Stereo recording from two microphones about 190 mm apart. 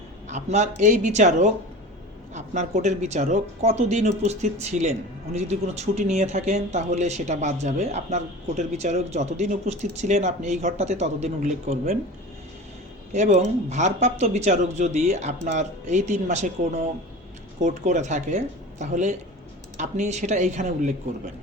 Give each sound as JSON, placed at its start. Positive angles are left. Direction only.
{"t": 0.3, "sound": "a man's voice", "side_deg": -35}
{"t": 13.1, "sound": "a man's voice", "side_deg": -35}